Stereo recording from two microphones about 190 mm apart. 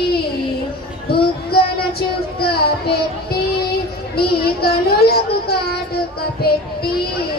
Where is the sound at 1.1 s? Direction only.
55° left (ahead or behind).